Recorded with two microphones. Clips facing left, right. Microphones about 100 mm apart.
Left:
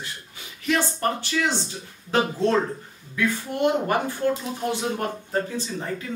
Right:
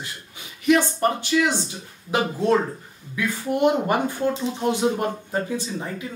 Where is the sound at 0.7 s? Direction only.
15° right (ahead or behind).